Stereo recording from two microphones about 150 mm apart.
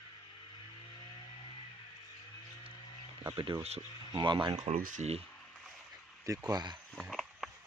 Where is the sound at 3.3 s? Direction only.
25° right (ahead or behind).